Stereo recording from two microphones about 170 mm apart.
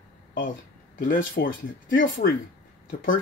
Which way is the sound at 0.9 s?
55° left (ahead or behind).